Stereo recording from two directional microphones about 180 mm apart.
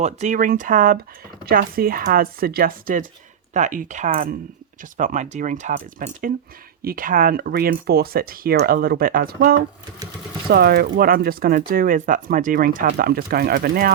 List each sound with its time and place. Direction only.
0.0 s speech: 40° right (ahead or behind)